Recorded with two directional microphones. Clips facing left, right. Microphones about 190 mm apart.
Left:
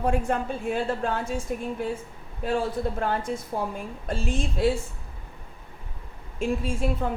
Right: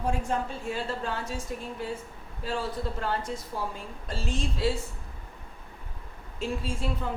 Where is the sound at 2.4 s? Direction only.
55° left (ahead or behind).